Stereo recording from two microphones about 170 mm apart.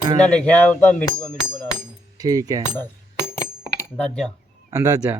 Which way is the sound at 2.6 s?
15° left (ahead or behind).